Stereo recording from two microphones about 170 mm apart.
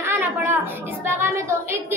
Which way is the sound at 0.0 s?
15° right (ahead or behind).